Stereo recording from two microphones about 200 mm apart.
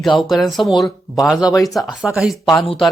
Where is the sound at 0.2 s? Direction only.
Centre (ahead or behind).